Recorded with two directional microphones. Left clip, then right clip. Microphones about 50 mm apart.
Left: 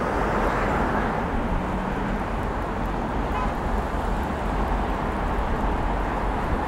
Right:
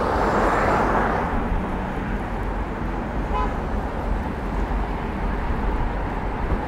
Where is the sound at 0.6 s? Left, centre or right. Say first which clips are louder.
Right 4 dB; right.